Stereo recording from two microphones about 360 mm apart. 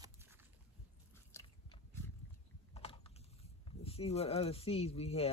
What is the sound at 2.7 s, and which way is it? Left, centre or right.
Typing, centre.